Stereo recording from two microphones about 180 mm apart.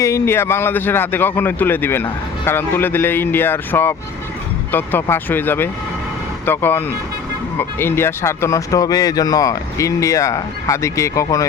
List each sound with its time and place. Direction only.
0.0 s speech: 15° left (ahead or behind)